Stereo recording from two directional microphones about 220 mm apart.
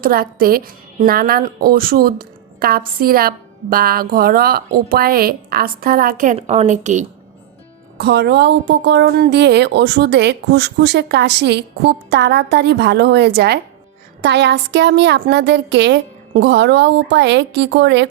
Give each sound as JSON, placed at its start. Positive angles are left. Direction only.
{"t": 0.0, "sound": "a woman's voice", "side_deg": -40}
{"t": 7.9, "sound": "a woman's voice", "side_deg": -50}